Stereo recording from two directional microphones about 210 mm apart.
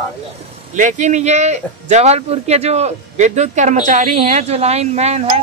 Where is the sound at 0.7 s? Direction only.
35° right (ahead or behind).